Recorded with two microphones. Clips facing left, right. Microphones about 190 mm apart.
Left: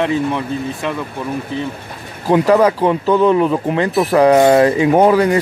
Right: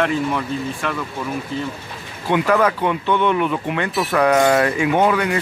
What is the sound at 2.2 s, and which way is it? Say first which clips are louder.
Speech: left 5 dB; 35° left (ahead or behind).